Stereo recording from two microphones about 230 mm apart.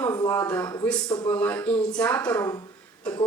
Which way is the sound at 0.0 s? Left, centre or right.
Centre.